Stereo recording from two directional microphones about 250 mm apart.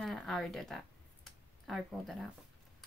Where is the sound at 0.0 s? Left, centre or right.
Centre.